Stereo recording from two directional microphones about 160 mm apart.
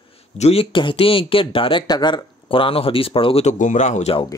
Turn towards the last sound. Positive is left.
turn(degrees=45)  # may be behind; listen again after turning